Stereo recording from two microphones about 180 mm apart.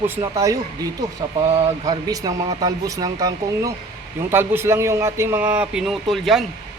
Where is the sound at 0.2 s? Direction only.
20° right (ahead or behind).